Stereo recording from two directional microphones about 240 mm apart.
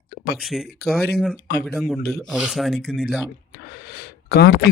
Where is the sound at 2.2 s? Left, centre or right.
Centre.